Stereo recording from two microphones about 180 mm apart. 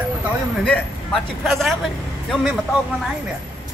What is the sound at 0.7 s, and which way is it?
A man's voice, 5° left (ahead or behind).